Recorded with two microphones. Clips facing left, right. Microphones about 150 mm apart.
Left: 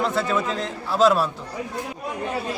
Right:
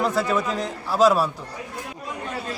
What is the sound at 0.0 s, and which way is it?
Speech, 5° right (ahead or behind).